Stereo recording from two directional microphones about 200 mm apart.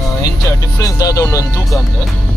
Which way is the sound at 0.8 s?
15° left (ahead or behind).